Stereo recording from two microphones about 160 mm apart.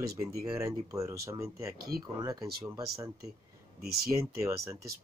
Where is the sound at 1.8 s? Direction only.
70° right (ahead or behind).